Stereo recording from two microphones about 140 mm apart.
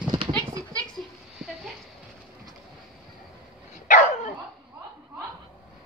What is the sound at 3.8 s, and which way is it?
Dog, 65° left (ahead or behind).